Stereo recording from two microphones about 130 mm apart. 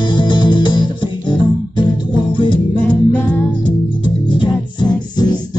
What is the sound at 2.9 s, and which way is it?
Music, 10° left (ahead or behind).